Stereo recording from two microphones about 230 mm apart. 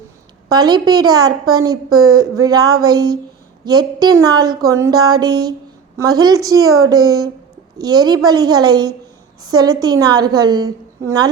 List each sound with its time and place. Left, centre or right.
0.4 s a woman's voice: centre